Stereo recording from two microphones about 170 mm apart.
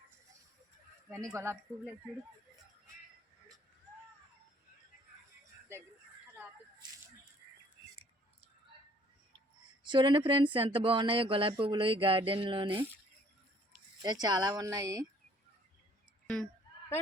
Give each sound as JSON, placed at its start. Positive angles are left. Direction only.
{"t": 1.3, "sound": "speech", "side_deg": -15}
{"t": 9.8, "sound": "speech", "side_deg": -25}
{"t": 14.0, "sound": "speech", "side_deg": -25}